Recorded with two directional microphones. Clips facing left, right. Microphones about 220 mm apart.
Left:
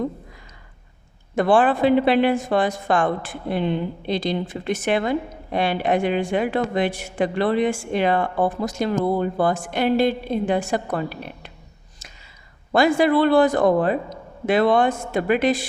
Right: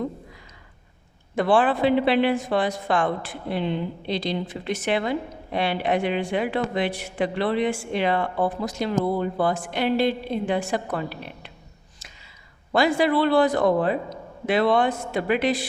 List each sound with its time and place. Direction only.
1.4 s a woman's voice: 45° left (ahead or behind)
12.7 s a woman's voice: 45° left (ahead or behind)